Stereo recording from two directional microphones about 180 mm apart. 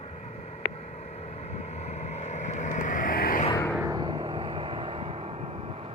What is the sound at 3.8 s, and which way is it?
Vehicle, 20° right (ahead or behind).